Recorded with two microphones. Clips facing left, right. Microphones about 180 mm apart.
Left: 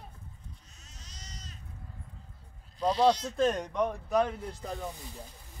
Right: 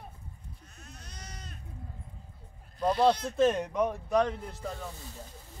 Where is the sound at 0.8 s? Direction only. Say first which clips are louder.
Right 5 dB; 55° right (ahead or behind).